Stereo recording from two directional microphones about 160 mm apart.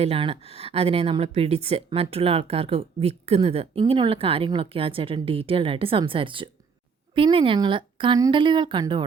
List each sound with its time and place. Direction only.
0.0 s speech: 35° right (ahead or behind)